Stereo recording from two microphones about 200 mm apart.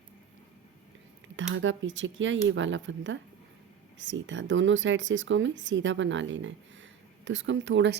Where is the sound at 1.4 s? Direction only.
70° right (ahead or behind).